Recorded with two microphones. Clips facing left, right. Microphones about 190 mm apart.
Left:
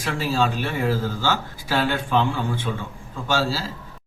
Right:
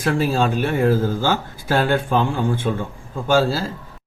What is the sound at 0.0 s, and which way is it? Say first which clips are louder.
Speech: right 4 dB; 55° right (ahead or behind).